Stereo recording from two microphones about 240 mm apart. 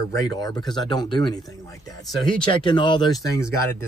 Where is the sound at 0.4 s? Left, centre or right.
Centre.